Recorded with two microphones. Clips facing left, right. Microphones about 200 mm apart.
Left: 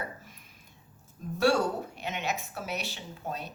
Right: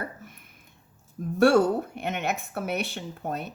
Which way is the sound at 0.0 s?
55° right (ahead or behind).